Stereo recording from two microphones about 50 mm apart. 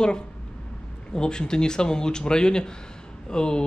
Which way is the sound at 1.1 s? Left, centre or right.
Centre.